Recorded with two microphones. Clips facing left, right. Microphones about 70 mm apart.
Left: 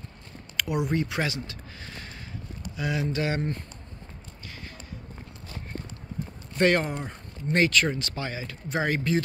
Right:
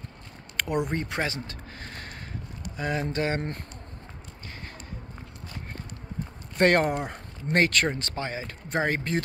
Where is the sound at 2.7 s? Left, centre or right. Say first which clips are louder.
Even; right.